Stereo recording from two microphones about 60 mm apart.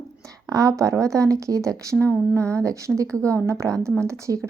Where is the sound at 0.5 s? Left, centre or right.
Right.